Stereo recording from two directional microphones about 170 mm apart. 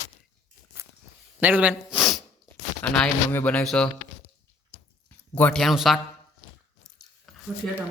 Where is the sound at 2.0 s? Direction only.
Centre (ahead or behind).